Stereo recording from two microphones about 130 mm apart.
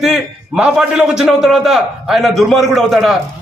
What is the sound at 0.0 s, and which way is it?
A man's voice, 5° right (ahead or behind).